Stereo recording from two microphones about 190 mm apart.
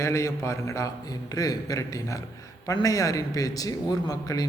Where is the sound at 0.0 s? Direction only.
15° left (ahead or behind).